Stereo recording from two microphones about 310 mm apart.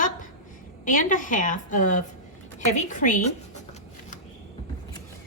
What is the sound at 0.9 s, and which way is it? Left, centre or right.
Speech, left.